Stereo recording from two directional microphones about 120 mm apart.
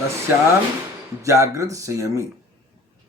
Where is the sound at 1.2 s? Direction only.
25° right (ahead or behind).